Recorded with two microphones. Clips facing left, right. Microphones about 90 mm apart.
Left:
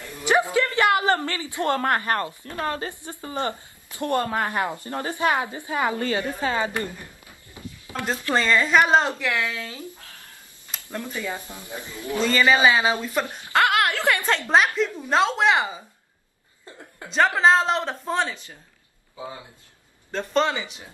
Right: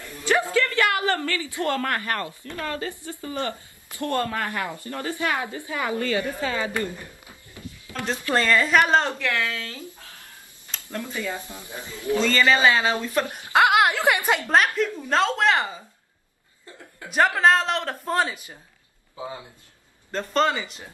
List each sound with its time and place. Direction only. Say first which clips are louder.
0.2 s a man's voice: left 1 dB; 20° left (ahead or behind)
7.5 s a sound: left 2 dB; 20° left (ahead or behind)
8.3 s speech: even; 15° left (ahead or behind)
10.7 s tick-tock: even; 15° left (ahead or behind)
11.1 s speech: even; 20° left (ahead or behind)
13.3 s speech: right 3 dB; 15° right (ahead or behind)
14.5 s a man's voice: left 2 dB; centre (ahead or behind)
15.0 s speech: left 2 dB; 10° left (ahead or behind)
17.1 s a man's voice: left 1 dB; 5° right (ahead or behind)
20.1 s a man's voice: even; centre (ahead or behind)